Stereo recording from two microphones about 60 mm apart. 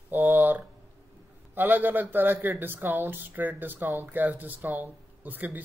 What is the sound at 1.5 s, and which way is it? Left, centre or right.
Speech, right.